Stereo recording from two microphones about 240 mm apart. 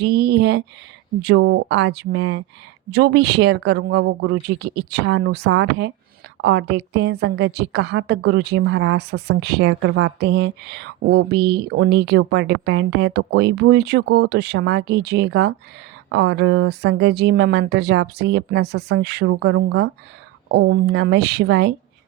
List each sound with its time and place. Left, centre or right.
0.0 s a woman's voice: right